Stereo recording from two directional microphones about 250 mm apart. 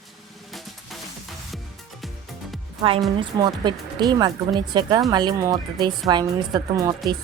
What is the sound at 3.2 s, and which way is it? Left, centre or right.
Speech, centre.